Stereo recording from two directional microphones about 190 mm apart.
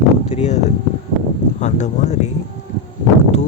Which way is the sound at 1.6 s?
40° left (ahead or behind).